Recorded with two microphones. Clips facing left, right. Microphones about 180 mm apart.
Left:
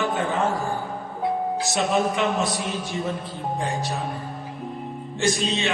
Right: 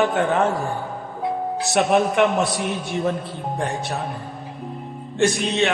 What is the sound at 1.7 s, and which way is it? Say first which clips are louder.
Speech: right 6 dB; 65° right (ahead or behind).